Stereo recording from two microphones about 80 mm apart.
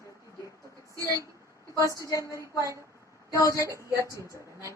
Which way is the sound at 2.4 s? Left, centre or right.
Right.